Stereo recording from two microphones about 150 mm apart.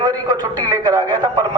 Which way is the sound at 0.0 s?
25° right (ahead or behind).